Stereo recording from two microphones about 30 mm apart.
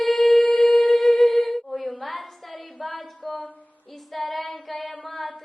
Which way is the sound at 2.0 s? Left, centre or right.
Centre.